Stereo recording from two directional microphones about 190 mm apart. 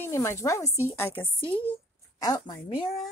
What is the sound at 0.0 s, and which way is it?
A woman's voice, 15° left (ahead or behind).